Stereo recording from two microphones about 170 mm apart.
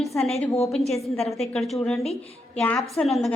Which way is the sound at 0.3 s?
35° left (ahead or behind).